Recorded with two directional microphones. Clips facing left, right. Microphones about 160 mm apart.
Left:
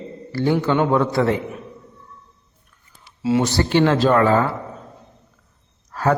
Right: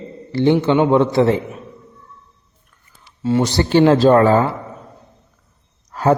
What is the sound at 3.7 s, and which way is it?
Speech, 35° right (ahead or behind).